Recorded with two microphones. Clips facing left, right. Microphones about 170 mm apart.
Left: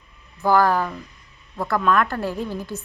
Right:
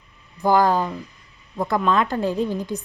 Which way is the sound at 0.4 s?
20° right (ahead or behind).